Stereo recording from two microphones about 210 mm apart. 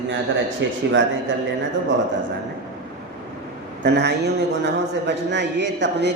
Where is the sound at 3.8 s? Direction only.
55° right (ahead or behind).